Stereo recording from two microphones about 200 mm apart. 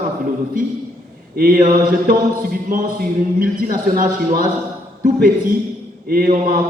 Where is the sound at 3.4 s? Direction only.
45° right (ahead or behind).